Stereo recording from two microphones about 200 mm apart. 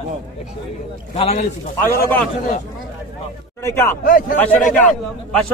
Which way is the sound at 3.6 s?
10° left (ahead or behind).